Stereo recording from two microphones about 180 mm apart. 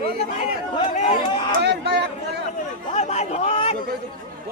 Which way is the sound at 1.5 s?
65° right (ahead or behind).